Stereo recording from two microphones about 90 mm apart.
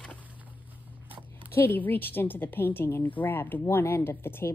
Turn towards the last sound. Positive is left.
turn(degrees=25)  # may be behind; listen again after turning